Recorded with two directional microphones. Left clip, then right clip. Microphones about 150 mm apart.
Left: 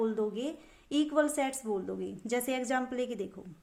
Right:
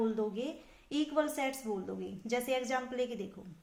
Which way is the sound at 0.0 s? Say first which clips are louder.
Left 2 dB; 40° left (ahead or behind).